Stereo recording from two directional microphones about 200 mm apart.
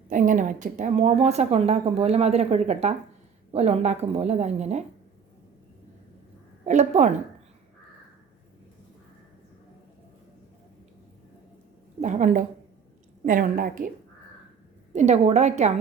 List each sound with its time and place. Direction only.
0.1 s a woman's voice: 40° right (ahead or behind)
6.7 s a woman's voice: 35° right (ahead or behind)
11.9 s a woman's voice: 40° right (ahead or behind)
14.9 s a woman's voice: 35° right (ahead or behind)